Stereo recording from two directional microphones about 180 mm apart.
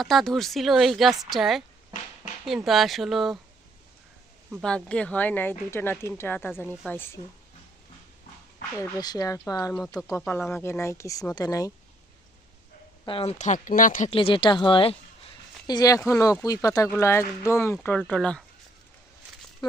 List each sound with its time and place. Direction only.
0.0 s a woman's voice: centre (ahead or behind)
4.6 s speech: 5° left (ahead or behind)
8.8 s speech: 20° left (ahead or behind)
10.0 s a woman's voice: 5° right (ahead or behind)
10.2 s speech: 10° left (ahead or behind)
13.1 s speech: 35° left (ahead or behind)
14.1 s a woman's voice: 30° left (ahead or behind); by 18.4 s 5° left (ahead or behind)